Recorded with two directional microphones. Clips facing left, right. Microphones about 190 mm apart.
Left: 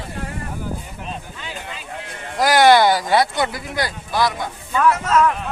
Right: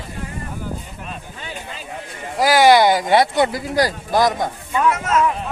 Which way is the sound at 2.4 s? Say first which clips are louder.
Right 1 dB; 10° right (ahead or behind).